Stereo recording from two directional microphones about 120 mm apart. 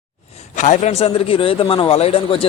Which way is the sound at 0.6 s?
80° left.